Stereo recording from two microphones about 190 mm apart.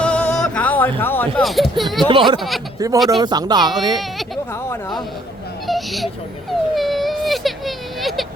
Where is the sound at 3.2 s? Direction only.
20° right (ahead or behind).